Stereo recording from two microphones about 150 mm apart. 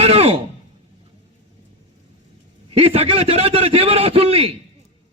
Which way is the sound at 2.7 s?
40° right (ahead or behind).